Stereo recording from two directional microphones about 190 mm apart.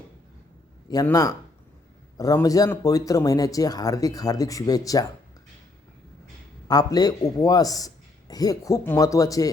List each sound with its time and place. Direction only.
0.9 s speech: 20° left (ahead or behind)
6.7 s speech: 20° left (ahead or behind)